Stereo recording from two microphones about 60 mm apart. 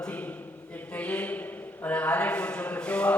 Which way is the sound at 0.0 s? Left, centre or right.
Left.